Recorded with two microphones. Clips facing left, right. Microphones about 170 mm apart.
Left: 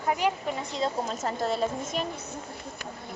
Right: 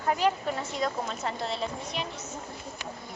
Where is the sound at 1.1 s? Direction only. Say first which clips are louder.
Left 4 dB; 45° left (ahead or behind).